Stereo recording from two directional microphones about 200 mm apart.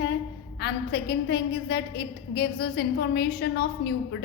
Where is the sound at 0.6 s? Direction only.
55° left (ahead or behind).